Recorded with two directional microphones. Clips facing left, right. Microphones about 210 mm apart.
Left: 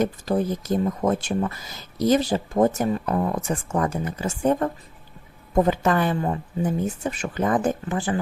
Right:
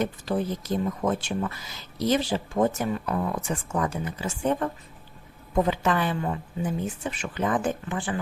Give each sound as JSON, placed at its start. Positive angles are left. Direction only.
{"t": 0.0, "sound": "speech", "side_deg": 45}